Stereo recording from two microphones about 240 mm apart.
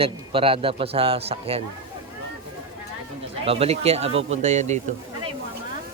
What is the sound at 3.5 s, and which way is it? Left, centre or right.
A man's voice, right.